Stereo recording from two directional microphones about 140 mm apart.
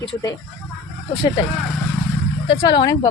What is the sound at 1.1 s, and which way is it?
Speech, 35° left (ahead or behind).